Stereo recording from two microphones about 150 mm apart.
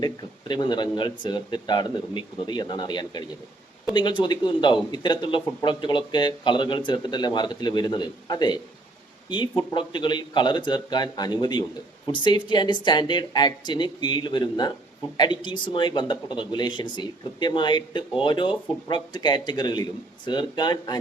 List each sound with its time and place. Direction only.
0.0 s speech: 30° left (ahead or behind)